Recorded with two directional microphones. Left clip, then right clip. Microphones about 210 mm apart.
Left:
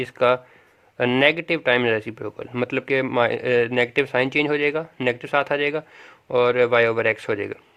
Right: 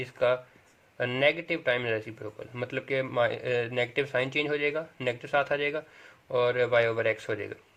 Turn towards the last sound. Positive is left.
turn(degrees=45)  # may be behind; listen again after turning